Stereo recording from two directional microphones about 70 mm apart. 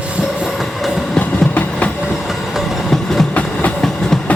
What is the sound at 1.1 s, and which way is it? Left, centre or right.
Train, centre.